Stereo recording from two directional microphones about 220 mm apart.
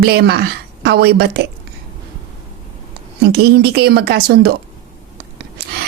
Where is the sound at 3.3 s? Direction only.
45° right (ahead or behind).